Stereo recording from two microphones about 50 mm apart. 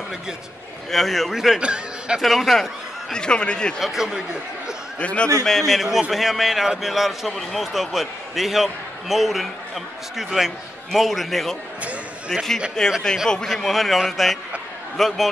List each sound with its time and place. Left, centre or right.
0.9 s a man's voice: centre
1.6 s a man's voice: centre
2.2 s a man's voice: centre
3.1 s speech: centre
3.8 s speech: centre
4.9 s a man's voice: left
5.4 s speech: centre
5.8 s a man's voice: centre
12.8 s a man's voice: centre